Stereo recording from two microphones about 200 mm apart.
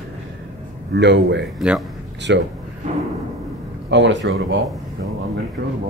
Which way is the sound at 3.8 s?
65° right (ahead or behind).